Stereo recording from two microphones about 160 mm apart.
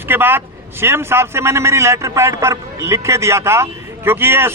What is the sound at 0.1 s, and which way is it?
A man's voice, 15° right (ahead or behind).